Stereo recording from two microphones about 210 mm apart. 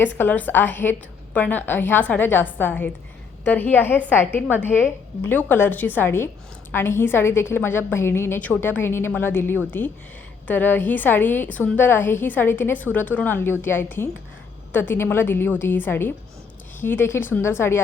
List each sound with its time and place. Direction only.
0.0 s a woman's voice: 10° left (ahead or behind)